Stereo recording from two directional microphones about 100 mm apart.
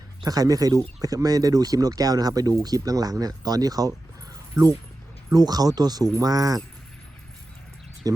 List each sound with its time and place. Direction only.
0.2 s speech: 40° right (ahead or behind)
8.0 s speech: 35° right (ahead or behind)